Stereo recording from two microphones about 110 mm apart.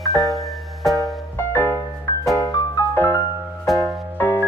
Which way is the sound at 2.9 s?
20° left (ahead or behind).